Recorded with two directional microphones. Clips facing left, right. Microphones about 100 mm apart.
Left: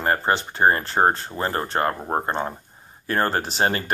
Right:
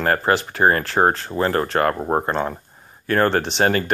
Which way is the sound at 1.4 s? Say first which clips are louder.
Right 5 dB; 20° left (ahead or behind).